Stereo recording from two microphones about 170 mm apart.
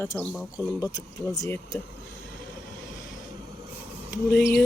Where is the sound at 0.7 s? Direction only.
20° left (ahead or behind).